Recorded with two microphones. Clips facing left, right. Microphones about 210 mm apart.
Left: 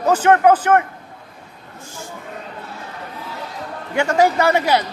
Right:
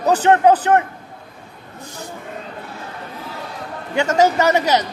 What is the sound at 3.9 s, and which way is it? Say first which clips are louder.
Speech: even; 20° right (ahead or behind).